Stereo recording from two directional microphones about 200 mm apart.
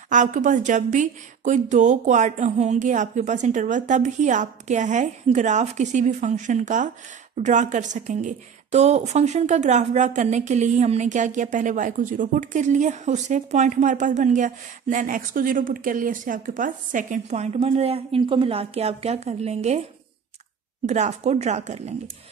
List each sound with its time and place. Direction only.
0.1 s a woman's voice: 40° right (ahead or behind)
20.8 s a woman's voice: 35° right (ahead or behind)